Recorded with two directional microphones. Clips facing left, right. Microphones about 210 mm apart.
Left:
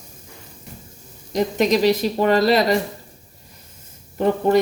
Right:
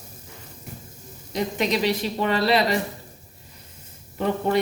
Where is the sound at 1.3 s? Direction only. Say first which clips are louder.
Left 6 dB; 45° left (ahead or behind).